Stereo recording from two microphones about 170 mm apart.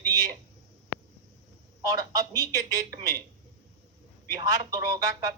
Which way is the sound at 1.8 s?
20° right (ahead or behind).